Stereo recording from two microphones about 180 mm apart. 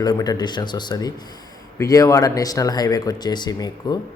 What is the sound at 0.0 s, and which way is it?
Speech, 20° left (ahead or behind).